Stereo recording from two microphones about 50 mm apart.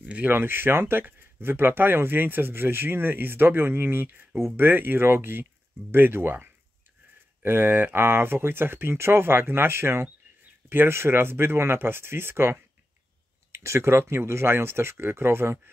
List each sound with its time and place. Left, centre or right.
0.0 s speech: right
0.3 s speech: right